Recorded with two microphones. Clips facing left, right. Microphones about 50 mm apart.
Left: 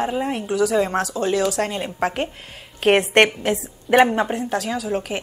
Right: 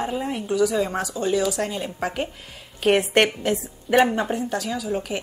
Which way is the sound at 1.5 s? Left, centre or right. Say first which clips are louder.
Left 3 dB; left.